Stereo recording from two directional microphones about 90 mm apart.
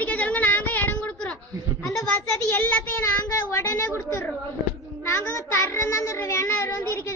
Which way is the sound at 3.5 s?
30° left (ahead or behind).